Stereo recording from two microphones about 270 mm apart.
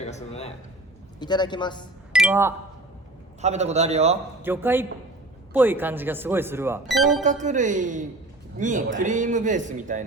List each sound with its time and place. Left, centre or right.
0.0 s a man's voice: left
2.1 s speech: centre
3.4 s a man's voice: right
4.4 s speech: centre
7.2 s a man's voice: right